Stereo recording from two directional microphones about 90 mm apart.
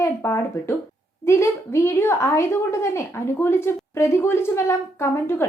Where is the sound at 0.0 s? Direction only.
30° left (ahead or behind).